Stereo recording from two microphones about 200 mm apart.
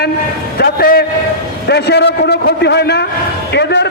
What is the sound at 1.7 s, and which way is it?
A man's voice, 55° left (ahead or behind).